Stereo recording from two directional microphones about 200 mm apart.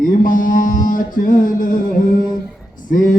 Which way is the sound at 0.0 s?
45° left (ahead or behind).